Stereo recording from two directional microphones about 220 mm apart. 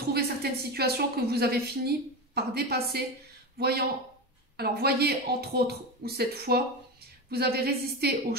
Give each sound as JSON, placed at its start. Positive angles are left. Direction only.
{"t": 0.0, "sound": "a woman's voice", "side_deg": -45}